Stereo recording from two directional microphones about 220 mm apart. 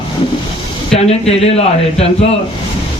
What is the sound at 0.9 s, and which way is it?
Speech, 30° left (ahead or behind).